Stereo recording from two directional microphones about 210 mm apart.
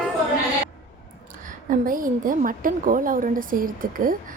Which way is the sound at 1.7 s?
40° right (ahead or behind).